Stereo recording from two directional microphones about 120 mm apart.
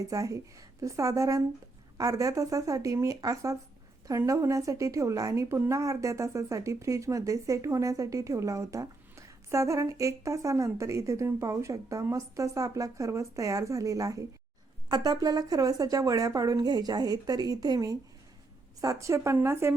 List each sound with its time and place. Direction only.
0.0 s speech: 30° right (ahead or behind)